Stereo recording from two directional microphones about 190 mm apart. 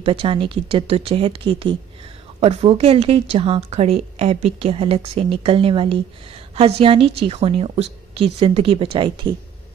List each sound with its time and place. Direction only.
0.0 s a woman's voice: 30° right (ahead or behind)